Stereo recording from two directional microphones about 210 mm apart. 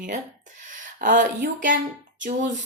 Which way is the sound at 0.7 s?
35° right (ahead or behind).